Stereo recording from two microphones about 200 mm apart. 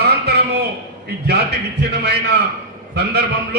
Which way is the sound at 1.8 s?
55° right (ahead or behind).